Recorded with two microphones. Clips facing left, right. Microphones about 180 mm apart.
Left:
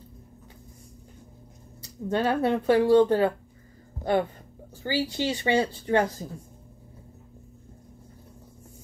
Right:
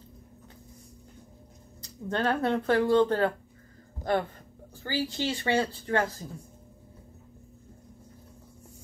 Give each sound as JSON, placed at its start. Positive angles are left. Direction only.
{"t": 2.0, "sound": "speech", "side_deg": 10}